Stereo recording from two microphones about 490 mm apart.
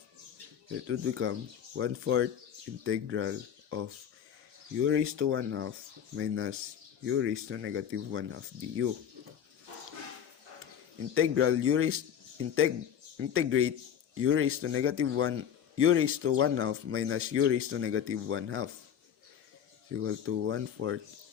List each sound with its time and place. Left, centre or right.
0.9 s speech: right
11.1 s speech: right
13.1 s speech: right
20.0 s speech: right